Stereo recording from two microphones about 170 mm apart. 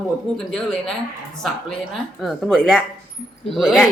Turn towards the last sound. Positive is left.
turn(degrees=0)  # may be behind; listen again after turning